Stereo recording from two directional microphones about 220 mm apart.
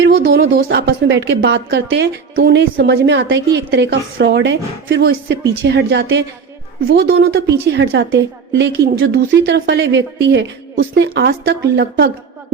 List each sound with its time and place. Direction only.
0.0 s a woman's voice: 45° right (ahead or behind)